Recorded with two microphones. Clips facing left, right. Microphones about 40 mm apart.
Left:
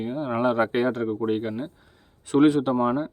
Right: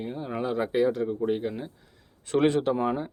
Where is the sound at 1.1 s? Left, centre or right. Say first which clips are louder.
Left 2 dB; left.